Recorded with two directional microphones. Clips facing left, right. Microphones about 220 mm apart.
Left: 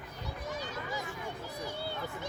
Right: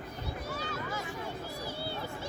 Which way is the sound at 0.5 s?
15° left (ahead or behind).